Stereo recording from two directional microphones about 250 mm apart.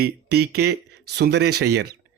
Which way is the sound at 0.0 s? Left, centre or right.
Right.